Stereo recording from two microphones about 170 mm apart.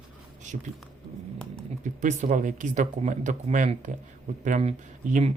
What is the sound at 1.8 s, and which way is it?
Speech, 45° right (ahead or behind).